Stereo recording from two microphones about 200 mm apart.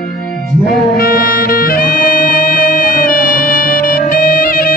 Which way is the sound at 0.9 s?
45° left (ahead or behind).